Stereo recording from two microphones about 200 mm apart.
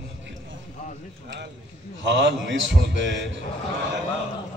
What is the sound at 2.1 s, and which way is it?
A man's voice, 65° right (ahead or behind).